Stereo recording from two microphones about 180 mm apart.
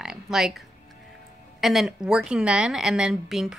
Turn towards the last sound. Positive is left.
turn(degrees=0)  # may be behind; listen again after turning